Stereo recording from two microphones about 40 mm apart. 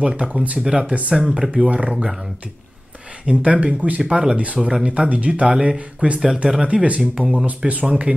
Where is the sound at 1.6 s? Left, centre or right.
Right.